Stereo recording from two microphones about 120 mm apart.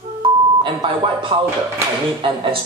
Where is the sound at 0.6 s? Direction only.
40° right (ahead or behind).